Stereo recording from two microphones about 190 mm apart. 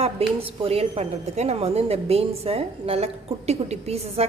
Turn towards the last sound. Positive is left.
turn(degrees=-35)  # may be behind; listen again after turning